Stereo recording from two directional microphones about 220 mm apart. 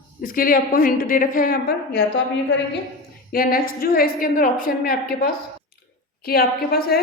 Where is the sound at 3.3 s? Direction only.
40° left (ahead or behind).